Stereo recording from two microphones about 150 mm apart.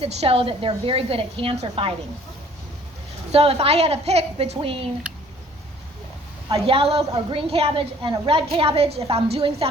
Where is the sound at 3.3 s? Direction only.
45° right (ahead or behind).